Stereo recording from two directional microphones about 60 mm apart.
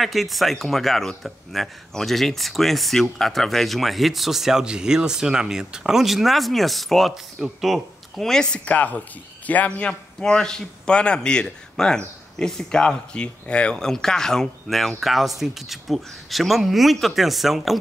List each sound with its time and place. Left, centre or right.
0.0 s a man's voice: centre